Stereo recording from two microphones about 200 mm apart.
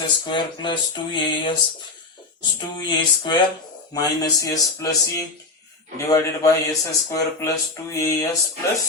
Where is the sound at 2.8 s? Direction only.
20° left (ahead or behind).